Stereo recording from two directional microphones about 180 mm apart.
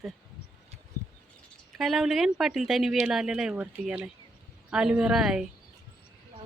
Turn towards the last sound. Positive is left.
turn(degrees=-5)  # may be behind; listen again after turning